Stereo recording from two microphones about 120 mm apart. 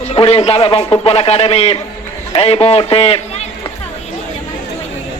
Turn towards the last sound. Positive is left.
turn(degrees=55)  # may be behind; listen again after turning